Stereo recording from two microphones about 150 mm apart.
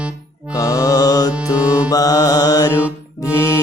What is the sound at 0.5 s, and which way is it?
Mantra, 20° left (ahead or behind).